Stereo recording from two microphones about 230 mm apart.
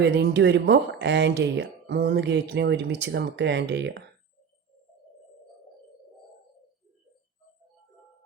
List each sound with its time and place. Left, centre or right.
0.0 s speech: right